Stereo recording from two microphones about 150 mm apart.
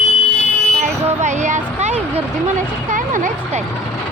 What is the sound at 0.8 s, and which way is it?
Vehicle, 50° right (ahead or behind).